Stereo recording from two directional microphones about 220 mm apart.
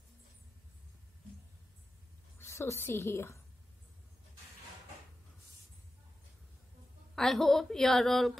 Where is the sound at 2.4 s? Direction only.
10° left (ahead or behind).